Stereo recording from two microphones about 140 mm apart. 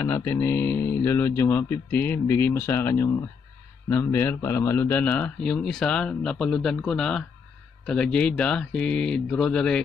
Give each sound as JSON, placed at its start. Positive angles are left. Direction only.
{"t": 0.0, "sound": "speech", "side_deg": 15}